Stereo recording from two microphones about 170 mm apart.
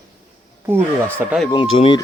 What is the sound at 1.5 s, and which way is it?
Speech, 30° left (ahead or behind).